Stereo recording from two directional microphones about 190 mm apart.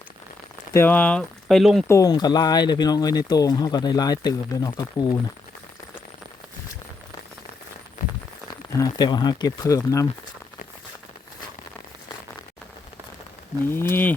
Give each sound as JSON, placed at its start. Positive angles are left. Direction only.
{"t": 0.7, "sound": "speech", "side_deg": 10}
{"t": 1.9, "sound": "speech", "side_deg": 20}
{"t": 8.8, "sound": "speech", "side_deg": 20}
{"t": 13.7, "sound": "speech", "side_deg": 10}